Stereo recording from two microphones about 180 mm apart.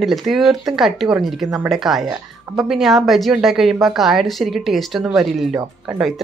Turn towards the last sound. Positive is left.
turn(degrees=0)  # may be behind; listen again after turning